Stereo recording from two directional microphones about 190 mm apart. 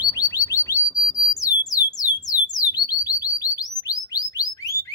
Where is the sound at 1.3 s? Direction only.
20° left (ahead or behind).